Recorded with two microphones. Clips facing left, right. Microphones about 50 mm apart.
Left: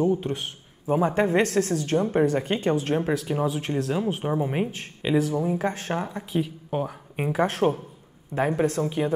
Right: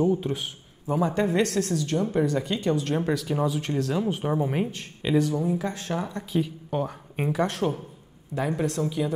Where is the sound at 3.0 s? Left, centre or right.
Centre.